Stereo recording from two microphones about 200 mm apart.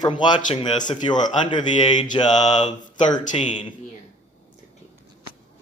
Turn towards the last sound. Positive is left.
turn(degrees=35)  # may be behind; listen again after turning